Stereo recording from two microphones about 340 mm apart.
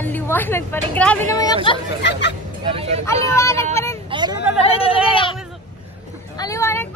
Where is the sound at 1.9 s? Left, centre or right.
Left.